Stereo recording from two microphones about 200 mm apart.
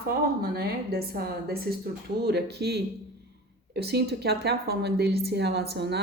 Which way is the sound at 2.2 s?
55° right (ahead or behind).